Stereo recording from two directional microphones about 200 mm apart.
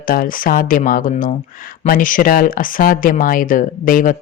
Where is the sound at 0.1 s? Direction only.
45° left (ahead or behind).